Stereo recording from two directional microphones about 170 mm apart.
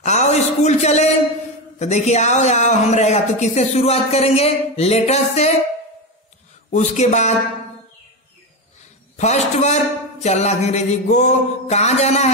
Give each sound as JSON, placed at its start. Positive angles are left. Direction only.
{"t": 0.0, "sound": "a sound", "side_deg": 40}
{"t": 1.8, "sound": "speech", "side_deg": 40}
{"t": 6.7, "sound": "speech", "side_deg": 40}
{"t": 9.1, "sound": "speech", "side_deg": 40}